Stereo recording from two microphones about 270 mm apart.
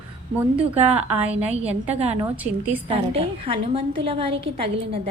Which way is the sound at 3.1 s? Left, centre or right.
Right.